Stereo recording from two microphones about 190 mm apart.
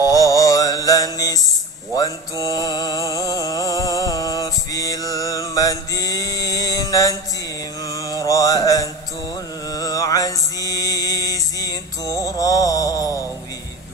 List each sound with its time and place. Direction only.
0.0 s music: 20° left (ahead or behind)
2.0 s mantra: 20° left (ahead or behind)